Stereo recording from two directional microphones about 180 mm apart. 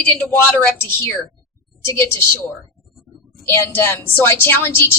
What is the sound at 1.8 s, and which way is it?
Speech, 15° left (ahead or behind).